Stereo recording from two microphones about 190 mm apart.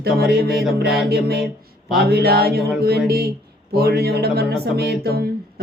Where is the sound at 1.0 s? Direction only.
55° right (ahead or behind).